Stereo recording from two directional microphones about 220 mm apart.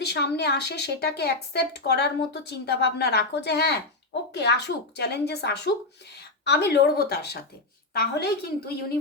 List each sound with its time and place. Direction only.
0.0 s speech: 50° left (ahead or behind)